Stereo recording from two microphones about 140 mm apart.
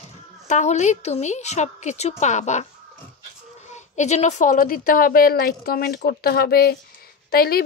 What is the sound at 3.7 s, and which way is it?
A woman's voice, 55° left (ahead or behind).